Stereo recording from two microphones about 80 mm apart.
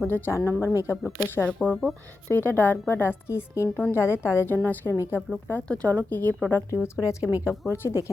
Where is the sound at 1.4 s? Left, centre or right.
Centre.